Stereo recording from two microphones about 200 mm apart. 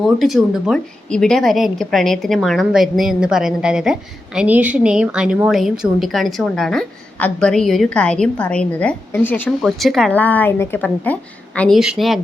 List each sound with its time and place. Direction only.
0.0 s a woman's voice: centre (ahead or behind)